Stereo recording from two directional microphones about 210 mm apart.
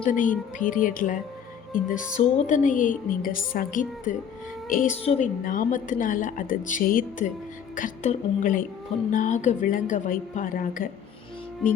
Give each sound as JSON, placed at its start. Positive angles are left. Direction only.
{"t": 0.1, "sound": "a woman's voice", "side_deg": 40}